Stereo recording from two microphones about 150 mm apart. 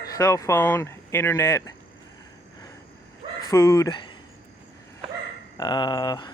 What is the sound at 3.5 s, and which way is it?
Speech, 20° left (ahead or behind).